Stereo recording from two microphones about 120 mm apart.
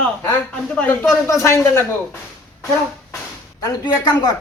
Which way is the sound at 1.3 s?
25° left (ahead or behind).